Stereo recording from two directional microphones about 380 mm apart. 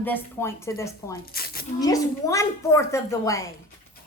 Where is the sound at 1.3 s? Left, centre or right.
Left.